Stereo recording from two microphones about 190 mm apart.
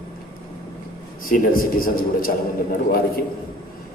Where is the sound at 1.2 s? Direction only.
50° left (ahead or behind).